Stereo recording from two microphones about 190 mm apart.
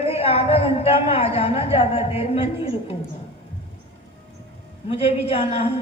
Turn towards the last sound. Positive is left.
turn(degrees=30)  # may be behind; listen again after turning